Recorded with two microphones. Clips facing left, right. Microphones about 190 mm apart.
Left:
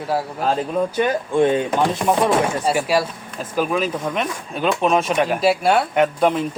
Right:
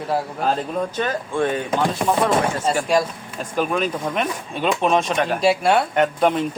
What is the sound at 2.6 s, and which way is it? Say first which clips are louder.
Speech: even; 5° left (ahead or behind).